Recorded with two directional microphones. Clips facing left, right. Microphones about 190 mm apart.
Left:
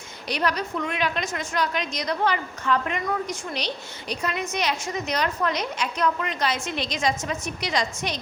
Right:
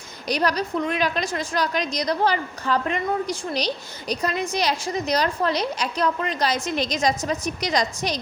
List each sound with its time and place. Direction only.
0.3 s a woman's voice: 40° right (ahead or behind)